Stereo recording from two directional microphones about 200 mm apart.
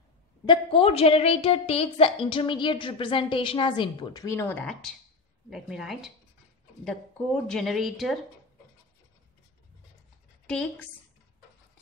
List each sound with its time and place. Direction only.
0.5 s a woman's voice: 25° left (ahead or behind); by 6.1 s centre (ahead or behind)
7.4 s speech: centre (ahead or behind)
10.4 s a woman's voice: 5° left (ahead or behind)